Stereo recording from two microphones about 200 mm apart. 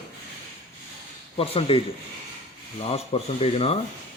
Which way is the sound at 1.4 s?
30° left (ahead or behind).